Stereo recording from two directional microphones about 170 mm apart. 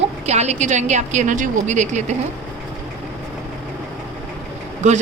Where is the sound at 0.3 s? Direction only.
40° right (ahead or behind).